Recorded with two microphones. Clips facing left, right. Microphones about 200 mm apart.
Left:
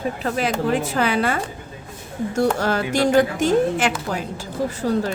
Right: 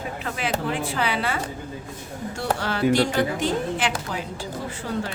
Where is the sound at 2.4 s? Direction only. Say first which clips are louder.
Left 5 dB; 45° left (ahead or behind).